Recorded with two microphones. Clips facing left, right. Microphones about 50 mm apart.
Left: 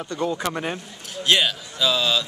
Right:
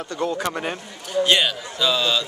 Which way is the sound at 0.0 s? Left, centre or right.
Centre.